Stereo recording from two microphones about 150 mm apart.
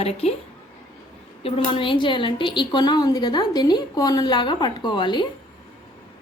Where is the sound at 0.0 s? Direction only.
45° left (ahead or behind).